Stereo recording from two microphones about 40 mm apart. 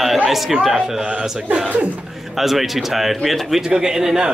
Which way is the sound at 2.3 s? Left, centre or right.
Centre.